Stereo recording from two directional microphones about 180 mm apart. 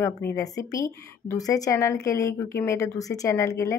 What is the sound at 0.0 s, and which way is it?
Speech, 15° left (ahead or behind).